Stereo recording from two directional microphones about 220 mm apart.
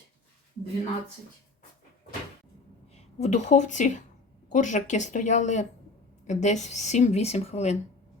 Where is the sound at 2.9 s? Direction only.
30° left (ahead or behind).